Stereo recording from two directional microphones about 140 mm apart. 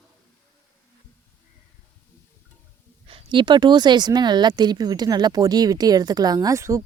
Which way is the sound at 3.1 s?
40° right (ahead or behind).